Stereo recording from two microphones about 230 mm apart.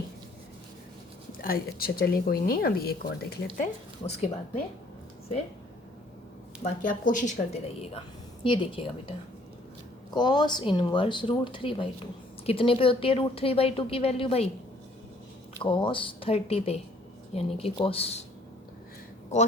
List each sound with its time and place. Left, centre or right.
1.4 s speech: left
3.6 s speech: left
6.7 s a woman's voice: left
10.1 s a woman's voice: centre
15.6 s a woman's voice: left